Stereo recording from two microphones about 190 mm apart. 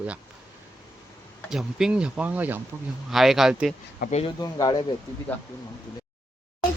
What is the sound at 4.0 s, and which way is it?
Speech, 40° left (ahead or behind).